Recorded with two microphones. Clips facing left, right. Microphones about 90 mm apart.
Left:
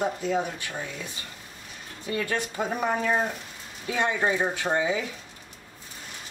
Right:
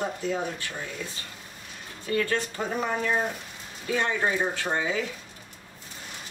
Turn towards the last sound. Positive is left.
turn(degrees=20)  # may be behind; listen again after turning